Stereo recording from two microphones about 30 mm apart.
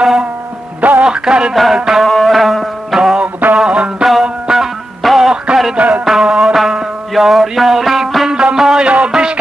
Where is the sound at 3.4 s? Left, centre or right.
Right.